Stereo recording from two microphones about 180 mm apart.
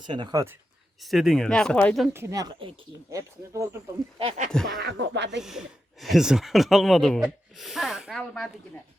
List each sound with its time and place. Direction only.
0.0 s speech: 25° right (ahead or behind)
1.0 s speech: centre (ahead or behind)
2.1 s speech: 15° right (ahead or behind)
4.2 s speech: 35° right (ahead or behind)
4.5 s speech: centre (ahead or behind)
4.8 s speech: 65° right (ahead or behind)
5.4 s speech: 5° right (ahead or behind)